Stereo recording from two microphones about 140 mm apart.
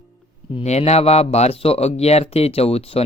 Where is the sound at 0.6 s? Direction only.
50° left (ahead or behind).